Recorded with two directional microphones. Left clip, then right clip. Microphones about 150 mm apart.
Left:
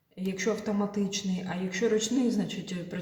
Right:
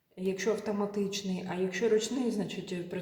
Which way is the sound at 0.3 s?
20° right (ahead or behind).